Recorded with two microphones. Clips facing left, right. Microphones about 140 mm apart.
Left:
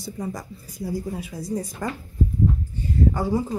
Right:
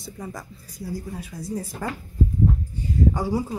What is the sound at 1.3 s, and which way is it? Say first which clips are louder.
Speech: left 1 dB; centre (ahead or behind).